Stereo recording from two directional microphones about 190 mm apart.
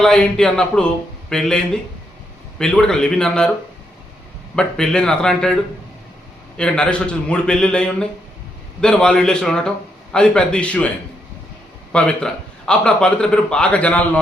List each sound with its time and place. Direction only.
0.0 s a man's voice: 5° left (ahead or behind)
4.5 s a man's voice: 5° left (ahead or behind)
6.6 s a man's voice: 5° left (ahead or behind)
11.9 s a man's voice: 5° left (ahead or behind)